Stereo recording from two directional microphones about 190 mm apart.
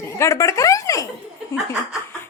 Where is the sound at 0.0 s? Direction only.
15° left (ahead or behind).